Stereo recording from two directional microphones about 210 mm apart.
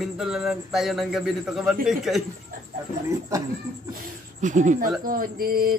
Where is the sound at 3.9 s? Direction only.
35° right (ahead or behind).